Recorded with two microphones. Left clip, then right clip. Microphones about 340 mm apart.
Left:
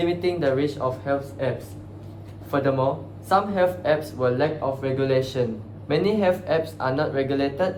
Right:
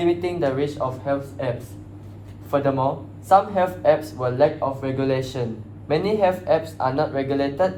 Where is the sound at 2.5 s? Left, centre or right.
Centre.